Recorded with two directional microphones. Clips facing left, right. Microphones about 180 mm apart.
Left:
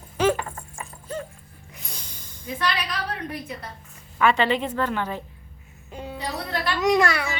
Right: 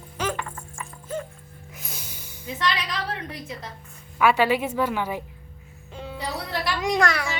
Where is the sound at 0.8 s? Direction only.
35° left (ahead or behind).